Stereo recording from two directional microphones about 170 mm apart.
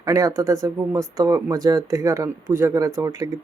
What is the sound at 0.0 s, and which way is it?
Speech, 20° right (ahead or behind).